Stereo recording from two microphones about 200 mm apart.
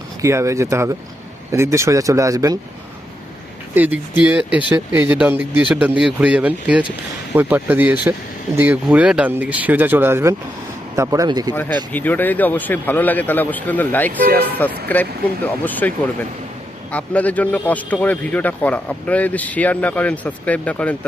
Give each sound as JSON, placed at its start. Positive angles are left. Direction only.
{"t": 0.2, "sound": "a man's voice", "side_deg": -15}
{"t": 3.8, "sound": "a man's voice", "side_deg": -10}
{"t": 11.9, "sound": "a man's voice", "side_deg": 10}
{"t": 16.9, "sound": "a man's voice", "side_deg": 5}